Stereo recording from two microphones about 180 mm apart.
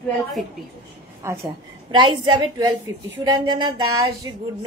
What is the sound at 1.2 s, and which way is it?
A woman's voice, 25° right (ahead or behind).